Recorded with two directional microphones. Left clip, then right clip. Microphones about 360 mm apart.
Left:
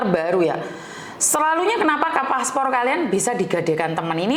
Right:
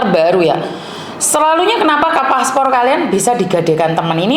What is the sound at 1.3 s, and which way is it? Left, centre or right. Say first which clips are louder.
A woman's voice: right 8 dB; left.